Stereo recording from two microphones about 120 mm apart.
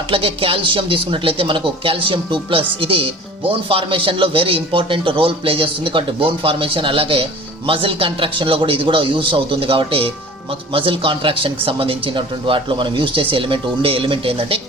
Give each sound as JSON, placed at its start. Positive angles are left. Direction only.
{"t": 0.1, "sound": "speech", "side_deg": -50}